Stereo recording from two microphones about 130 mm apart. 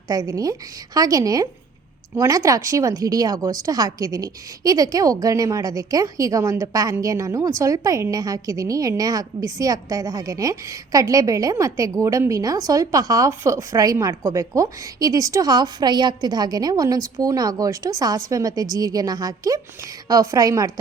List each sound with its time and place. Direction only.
0.1 s a woman's voice: 25° right (ahead or behind)